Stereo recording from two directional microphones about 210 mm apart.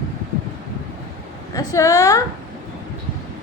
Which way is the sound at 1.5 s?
15° left (ahead or behind).